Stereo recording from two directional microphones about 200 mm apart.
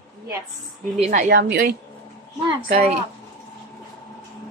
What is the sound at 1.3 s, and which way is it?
Speech, 50° right (ahead or behind).